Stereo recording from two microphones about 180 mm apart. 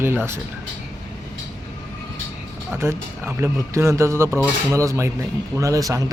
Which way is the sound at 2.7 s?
15° right (ahead or behind).